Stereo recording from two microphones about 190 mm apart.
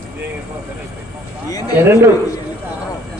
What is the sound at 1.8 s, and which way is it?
Speech, 10° right (ahead or behind).